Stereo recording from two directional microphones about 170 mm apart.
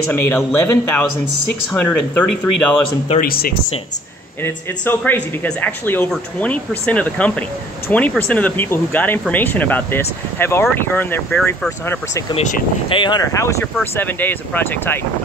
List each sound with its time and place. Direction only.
0.1 s speech: 10° left (ahead or behind)
3.2 s speech: 60° left (ahead or behind)
4.4 s speech: 10° left (ahead or behind)
12.9 s speech: 25° left (ahead or behind)